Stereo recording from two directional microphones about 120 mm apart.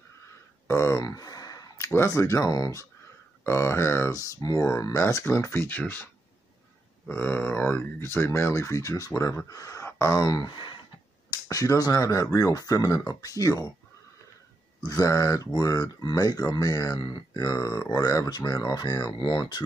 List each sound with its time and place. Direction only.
0.7 s a sound: 20° left (ahead or behind)
1.9 s speech: 25° left (ahead or behind)
7.1 s speech: 15° left (ahead or behind); by 10.8 s 40° left (ahead or behind)
11.2 s speech: 30° left (ahead or behind)
14.8 s speech: 30° left (ahead or behind)